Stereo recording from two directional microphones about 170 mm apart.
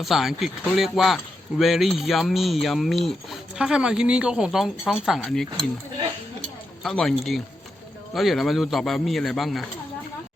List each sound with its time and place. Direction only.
0.0 s speech: centre (ahead or behind)
6.8 s speech: centre (ahead or behind)